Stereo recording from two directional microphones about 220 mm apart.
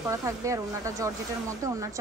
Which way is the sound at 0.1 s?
15° right (ahead or behind).